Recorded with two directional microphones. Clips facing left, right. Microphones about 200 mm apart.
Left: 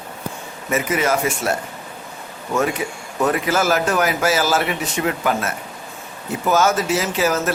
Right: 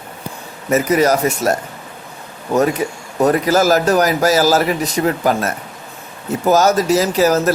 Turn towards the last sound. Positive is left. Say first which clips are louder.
# right 6 dB
turn(degrees=-40)  # may be behind; listen again after turning